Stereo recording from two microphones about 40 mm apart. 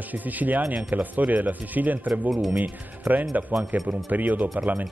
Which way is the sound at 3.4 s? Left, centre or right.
Right.